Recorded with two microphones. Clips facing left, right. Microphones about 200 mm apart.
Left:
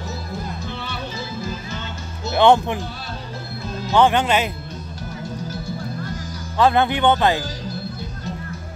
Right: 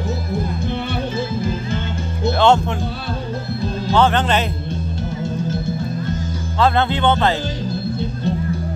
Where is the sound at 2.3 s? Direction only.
15° left (ahead or behind).